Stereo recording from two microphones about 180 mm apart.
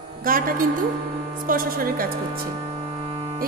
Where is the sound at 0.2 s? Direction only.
50° right (ahead or behind).